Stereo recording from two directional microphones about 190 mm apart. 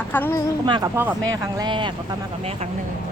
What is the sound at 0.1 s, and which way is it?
Speech, 10° left (ahead or behind).